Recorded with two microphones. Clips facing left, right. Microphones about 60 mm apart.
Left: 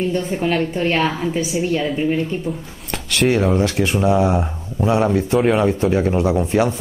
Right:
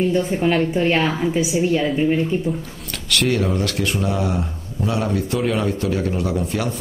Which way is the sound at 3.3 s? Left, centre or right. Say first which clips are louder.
Left 6 dB; left.